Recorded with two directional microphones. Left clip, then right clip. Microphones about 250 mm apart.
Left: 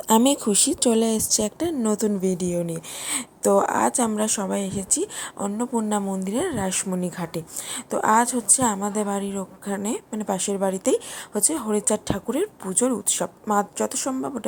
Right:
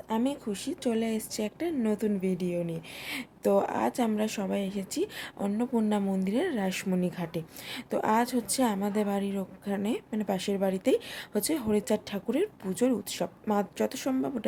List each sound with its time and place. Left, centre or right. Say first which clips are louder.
0.1 s speech: left 12 dB; left; by 14.4 s centre